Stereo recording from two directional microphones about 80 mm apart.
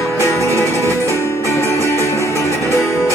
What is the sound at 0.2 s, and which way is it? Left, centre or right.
Music, left.